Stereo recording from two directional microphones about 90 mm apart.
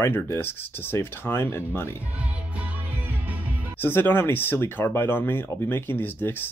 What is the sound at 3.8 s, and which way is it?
Speech, 25° left (ahead or behind).